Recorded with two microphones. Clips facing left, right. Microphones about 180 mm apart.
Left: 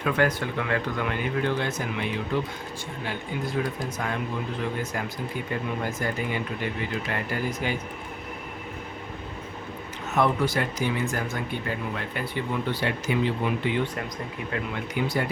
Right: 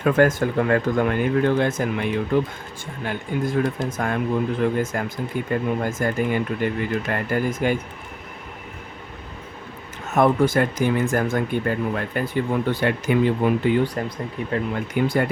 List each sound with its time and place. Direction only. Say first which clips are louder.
0.0 s speech: right 7 dB; 45° right (ahead or behind)
10.1 s speech: right 6 dB; 50° right (ahead or behind)
14.9 s speech: right 6 dB; 50° right (ahead or behind)